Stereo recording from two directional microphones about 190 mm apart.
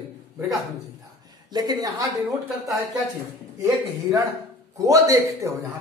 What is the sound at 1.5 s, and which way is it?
Speech, 20° right (ahead or behind).